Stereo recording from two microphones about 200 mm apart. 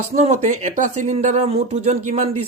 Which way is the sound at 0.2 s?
35° right (ahead or behind).